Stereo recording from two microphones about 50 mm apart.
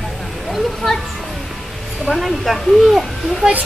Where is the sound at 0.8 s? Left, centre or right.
Centre.